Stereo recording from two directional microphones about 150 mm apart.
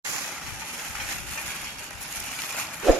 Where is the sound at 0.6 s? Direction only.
5° left (ahead or behind).